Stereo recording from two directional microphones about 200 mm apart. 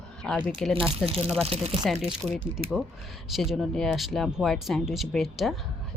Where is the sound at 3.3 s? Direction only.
Centre (ahead or behind).